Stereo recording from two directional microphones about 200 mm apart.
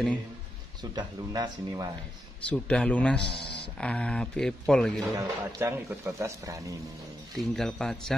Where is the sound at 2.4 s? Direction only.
5° left (ahead or behind).